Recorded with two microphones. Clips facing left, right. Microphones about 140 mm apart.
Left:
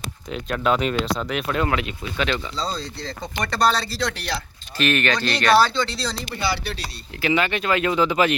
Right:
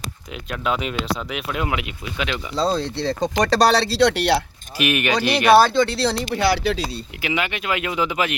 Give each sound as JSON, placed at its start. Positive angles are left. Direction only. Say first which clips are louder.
{"t": 0.5, "sound": "speech", "louder": "left 3 dB", "side_deg": -5}
{"t": 2.6, "sound": "speech", "louder": "right 7 dB", "side_deg": -55}
{"t": 4.8, "sound": "speech", "louder": "right 1 dB", "side_deg": -10}
{"t": 5.5, "sound": "speech", "louder": "right 4 dB", "side_deg": -55}
{"t": 7.2, "sound": "speech", "louder": "left 4 dB", "side_deg": -10}